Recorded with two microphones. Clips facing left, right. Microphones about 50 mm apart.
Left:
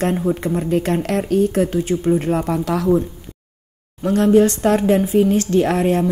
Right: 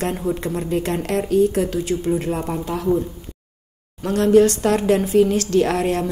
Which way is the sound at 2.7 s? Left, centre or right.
Left.